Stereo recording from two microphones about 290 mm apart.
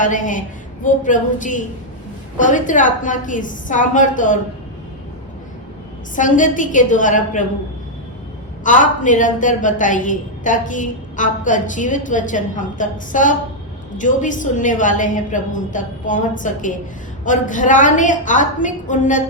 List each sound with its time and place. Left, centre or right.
0.0 s a woman's voice: left
6.1 s a woman's voice: left
8.6 s a woman's voice: left